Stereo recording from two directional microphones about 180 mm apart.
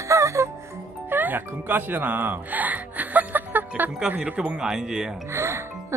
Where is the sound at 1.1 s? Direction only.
10° right (ahead or behind).